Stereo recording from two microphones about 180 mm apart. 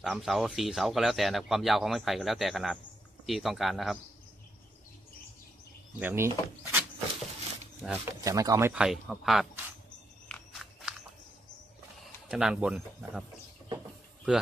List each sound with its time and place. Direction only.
0.0 s speech: centre (ahead or behind)
5.9 s speech: 15° right (ahead or behind)
7.8 s speech: 5° right (ahead or behind)
8.2 s speech: 20° right (ahead or behind)
8.7 s speech: 5° right (ahead or behind)
10.2 s walk: 5° left (ahead or behind)
12.0 s speech: 5° right (ahead or behind)
14.3 s speech: 5° right (ahead or behind)